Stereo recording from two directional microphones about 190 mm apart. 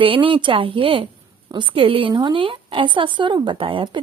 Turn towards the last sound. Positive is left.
turn(degrees=-25)  # may be behind; listen again after turning